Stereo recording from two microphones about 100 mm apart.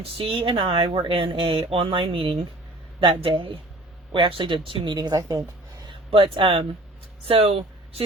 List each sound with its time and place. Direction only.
0.0 s speech: 65° right (ahead or behind)
4.9 s speech: 40° right (ahead or behind)
5.9 s speech: 60° right (ahead or behind)
7.3 s speech: 75° right (ahead or behind)